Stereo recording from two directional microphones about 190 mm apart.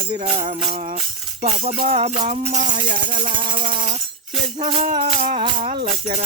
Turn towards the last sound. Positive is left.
turn(degrees=-35)  # may be behind; listen again after turning